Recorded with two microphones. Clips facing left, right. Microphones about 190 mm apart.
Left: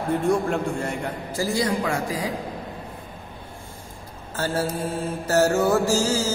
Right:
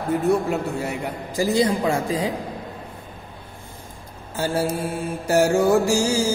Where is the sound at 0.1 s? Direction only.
5° right (ahead or behind); by 2.3 s 25° right (ahead or behind).